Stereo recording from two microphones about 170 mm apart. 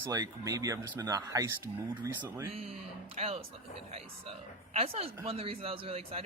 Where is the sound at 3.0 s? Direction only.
35° right (ahead or behind).